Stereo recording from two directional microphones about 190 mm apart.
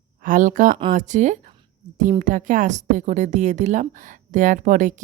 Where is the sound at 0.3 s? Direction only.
45° right (ahead or behind).